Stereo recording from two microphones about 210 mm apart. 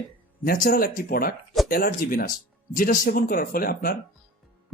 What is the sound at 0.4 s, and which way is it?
Speech, 40° left (ahead or behind).